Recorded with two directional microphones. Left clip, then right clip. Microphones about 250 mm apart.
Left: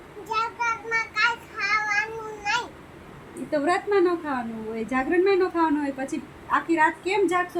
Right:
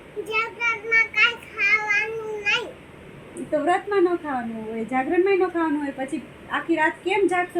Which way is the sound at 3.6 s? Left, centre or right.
Centre.